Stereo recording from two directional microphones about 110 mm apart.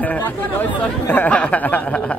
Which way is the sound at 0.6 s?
15° left (ahead or behind).